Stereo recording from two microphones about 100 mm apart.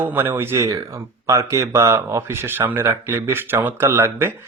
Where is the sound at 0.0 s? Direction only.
20° right (ahead or behind).